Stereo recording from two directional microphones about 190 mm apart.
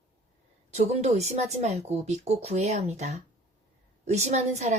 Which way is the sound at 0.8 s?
35° right (ahead or behind).